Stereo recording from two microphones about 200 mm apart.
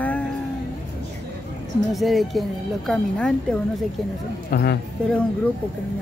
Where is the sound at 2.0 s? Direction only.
Centre (ahead or behind).